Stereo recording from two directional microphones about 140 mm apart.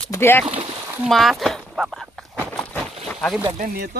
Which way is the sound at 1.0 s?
Centre (ahead or behind).